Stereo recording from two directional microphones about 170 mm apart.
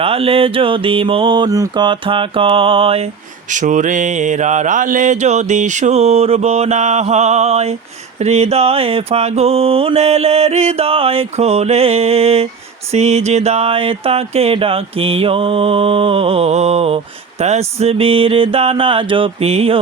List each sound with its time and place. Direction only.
0.0 s mantra: 35° right (ahead or behind)
3.5 s mantra: 50° right (ahead or behind)